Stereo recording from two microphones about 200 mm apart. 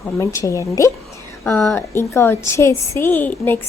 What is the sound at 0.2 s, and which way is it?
A woman's voice, 15° left (ahead or behind).